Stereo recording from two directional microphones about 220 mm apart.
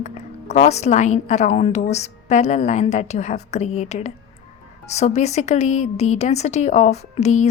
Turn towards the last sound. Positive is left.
turn(degrees=30)  # may be behind; listen again after turning